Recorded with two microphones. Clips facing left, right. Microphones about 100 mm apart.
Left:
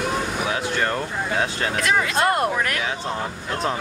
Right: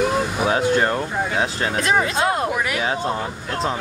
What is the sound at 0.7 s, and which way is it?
Speech, 20° right (ahead or behind).